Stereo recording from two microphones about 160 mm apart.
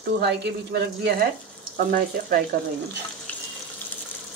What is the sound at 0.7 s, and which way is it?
Speech, 90° right.